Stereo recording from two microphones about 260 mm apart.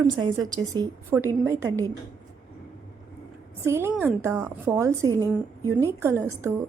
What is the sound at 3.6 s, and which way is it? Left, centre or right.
A woman's voice, centre.